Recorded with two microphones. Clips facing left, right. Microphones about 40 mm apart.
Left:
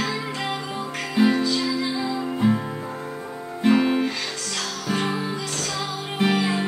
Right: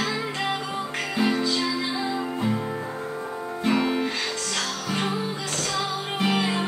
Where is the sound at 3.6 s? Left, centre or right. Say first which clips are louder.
Left 4 dB; centre.